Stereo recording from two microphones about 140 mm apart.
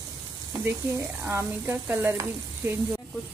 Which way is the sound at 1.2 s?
20° right (ahead or behind).